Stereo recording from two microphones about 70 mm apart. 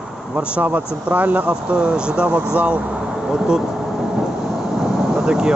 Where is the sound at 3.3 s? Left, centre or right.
Centre.